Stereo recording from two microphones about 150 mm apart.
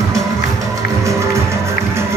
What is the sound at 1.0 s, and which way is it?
Music, 20° right (ahead or behind).